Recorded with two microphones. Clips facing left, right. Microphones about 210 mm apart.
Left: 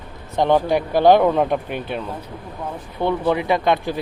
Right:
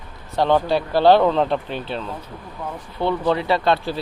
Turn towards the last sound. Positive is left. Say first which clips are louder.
# left 1 dB
turn(degrees=15)  # may be behind; listen again after turning